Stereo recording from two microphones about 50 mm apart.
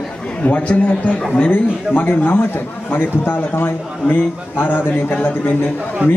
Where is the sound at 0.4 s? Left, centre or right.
Left.